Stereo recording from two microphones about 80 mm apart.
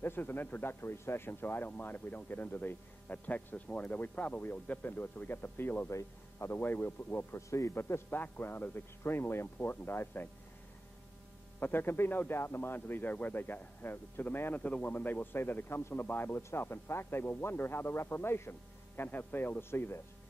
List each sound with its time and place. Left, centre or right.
0.0 s speech: left
5.9 s speech: left
11.6 s speech: left